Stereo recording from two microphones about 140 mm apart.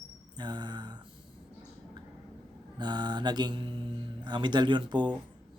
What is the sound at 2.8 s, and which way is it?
Speech, 30° right (ahead or behind).